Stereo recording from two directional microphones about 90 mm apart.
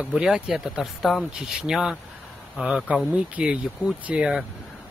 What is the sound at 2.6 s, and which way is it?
Speech, 15° right (ahead or behind).